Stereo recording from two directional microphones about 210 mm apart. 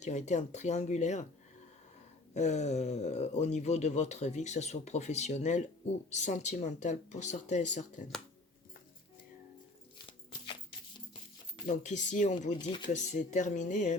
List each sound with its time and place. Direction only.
0.0 s speech: 35° left (ahead or behind)
2.3 s speech: 35° left (ahead or behind)
10.1 s a sound: 25° left (ahead or behind)
11.6 s speech: 35° left (ahead or behind)